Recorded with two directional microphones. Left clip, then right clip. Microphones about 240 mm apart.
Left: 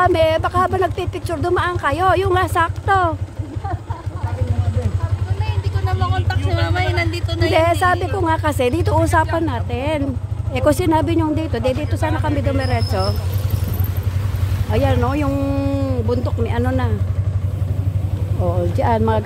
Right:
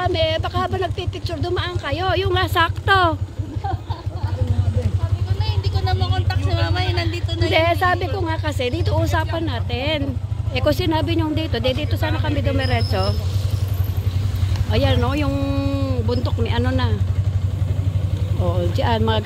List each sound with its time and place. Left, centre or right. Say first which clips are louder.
0.0 s speech: left 6 dB; left
2.5 s speech: even; centre
5.9 s speech: left 3 dB; centre
6.5 s speech: left 3 dB; centre; by 9.1 s left
9.1 s speech: left 6 dB; centre
14.7 s speech: left 2 dB; centre
18.4 s speech: left 3 dB; centre